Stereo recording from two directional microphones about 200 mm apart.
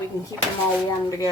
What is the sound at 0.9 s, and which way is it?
Speech, 15° left (ahead or behind).